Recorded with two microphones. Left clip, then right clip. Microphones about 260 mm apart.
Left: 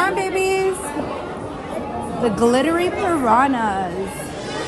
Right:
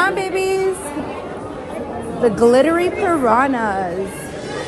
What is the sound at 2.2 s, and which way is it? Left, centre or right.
A woman's voice, centre.